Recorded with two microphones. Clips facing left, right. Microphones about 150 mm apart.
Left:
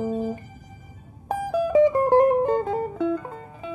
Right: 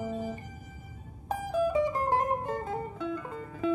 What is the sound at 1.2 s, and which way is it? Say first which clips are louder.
Music: left 4 dB; 90° left.